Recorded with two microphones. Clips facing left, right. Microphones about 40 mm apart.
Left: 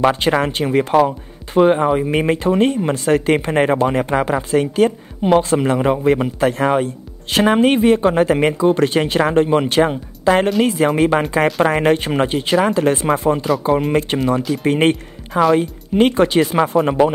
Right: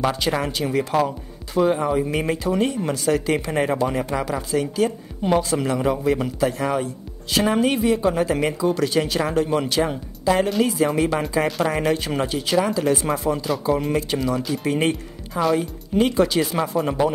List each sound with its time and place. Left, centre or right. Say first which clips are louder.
0.0 s speech: left 7 dB; left
6.4 s speech: left 6 dB; left